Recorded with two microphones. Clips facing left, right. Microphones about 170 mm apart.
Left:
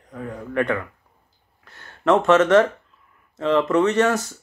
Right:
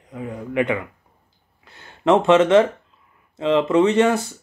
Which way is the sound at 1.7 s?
10° right (ahead or behind).